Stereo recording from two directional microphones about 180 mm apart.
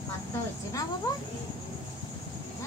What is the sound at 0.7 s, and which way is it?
Speech, 20° left (ahead or behind).